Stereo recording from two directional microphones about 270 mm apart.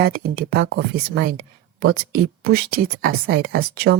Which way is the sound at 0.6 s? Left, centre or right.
Right.